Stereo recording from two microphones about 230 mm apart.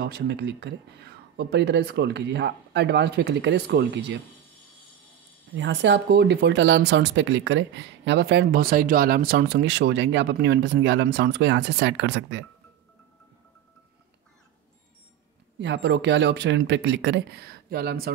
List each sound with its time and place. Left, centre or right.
0.0 s speech: right
5.6 s speech: right
15.6 s speech: right